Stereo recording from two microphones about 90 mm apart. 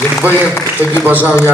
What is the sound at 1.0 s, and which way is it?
Speech, 20° right (ahead or behind).